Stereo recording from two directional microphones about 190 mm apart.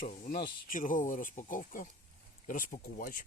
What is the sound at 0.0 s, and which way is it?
Speech, 50° left (ahead or behind).